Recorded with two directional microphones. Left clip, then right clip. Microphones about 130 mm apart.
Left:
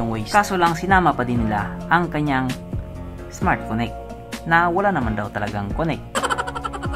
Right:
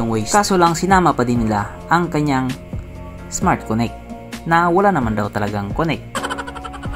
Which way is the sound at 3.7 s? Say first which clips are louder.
Right 4 dB; 55° right (ahead or behind).